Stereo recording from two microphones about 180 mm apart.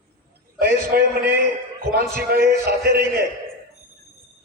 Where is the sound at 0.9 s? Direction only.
60° right (ahead or behind).